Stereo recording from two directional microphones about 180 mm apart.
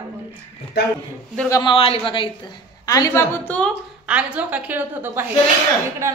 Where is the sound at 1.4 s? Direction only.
20° left (ahead or behind).